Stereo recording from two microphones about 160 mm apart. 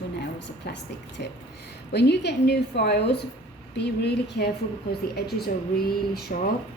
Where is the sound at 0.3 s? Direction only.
90° left.